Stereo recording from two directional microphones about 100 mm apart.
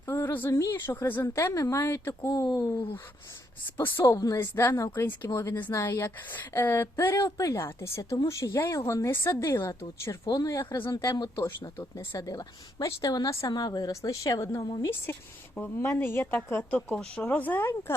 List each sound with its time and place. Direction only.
0.0 s a woman's voice: 25° left (ahead or behind)
1.8 s a woman's voice: 25° left (ahead or behind)
2.2 s a woman's voice: 40° left (ahead or behind)
3.8 s a woman's voice: 25° left (ahead or behind)
15.5 s speech: 15° left (ahead or behind)